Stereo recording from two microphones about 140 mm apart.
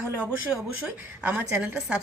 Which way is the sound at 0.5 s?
5° right (ahead or behind).